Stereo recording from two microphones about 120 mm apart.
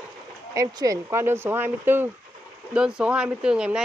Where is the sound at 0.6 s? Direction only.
30° right (ahead or behind).